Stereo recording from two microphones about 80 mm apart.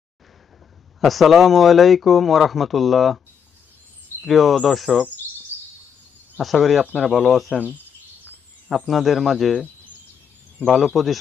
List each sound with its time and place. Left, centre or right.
1.0 s speech: centre
4.2 s speech: centre
6.3 s speech: centre
7.5 s speech: centre
8.6 s speech: centre
10.9 s speech: centre